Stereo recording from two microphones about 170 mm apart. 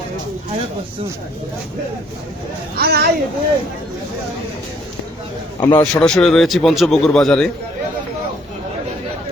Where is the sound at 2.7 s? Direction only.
65° right (ahead or behind).